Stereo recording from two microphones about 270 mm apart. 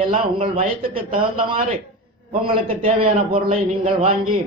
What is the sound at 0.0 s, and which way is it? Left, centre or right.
A man's voice, centre.